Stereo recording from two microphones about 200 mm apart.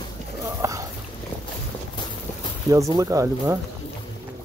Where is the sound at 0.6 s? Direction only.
15° right (ahead or behind).